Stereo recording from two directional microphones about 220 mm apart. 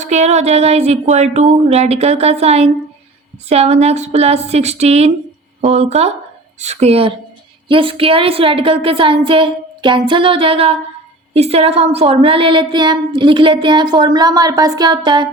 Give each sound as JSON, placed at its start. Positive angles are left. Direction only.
{"t": 0.0, "sound": "speech", "side_deg": -30}